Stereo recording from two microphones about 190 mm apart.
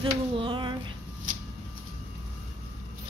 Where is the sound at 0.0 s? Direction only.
25° right (ahead or behind).